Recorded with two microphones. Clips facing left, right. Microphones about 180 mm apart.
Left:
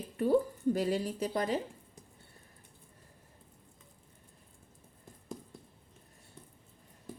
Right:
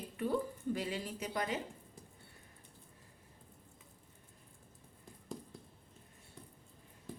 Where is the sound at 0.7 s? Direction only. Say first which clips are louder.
Left 8 dB; 40° left (ahead or behind).